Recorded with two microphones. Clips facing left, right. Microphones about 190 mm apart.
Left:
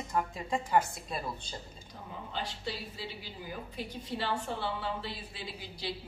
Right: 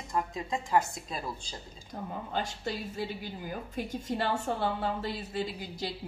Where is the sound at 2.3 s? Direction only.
45° right (ahead or behind).